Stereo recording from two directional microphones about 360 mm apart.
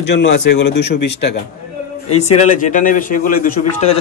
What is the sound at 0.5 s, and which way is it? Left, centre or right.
Speech, left.